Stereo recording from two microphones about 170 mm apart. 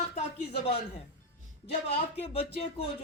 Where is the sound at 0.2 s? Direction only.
35° left (ahead or behind).